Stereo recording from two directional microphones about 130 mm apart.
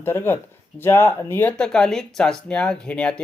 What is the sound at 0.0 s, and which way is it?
Speech, 15° left (ahead or behind).